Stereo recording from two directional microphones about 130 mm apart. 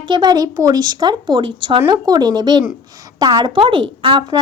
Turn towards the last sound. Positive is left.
turn(degrees=-40)  # may be behind; listen again after turning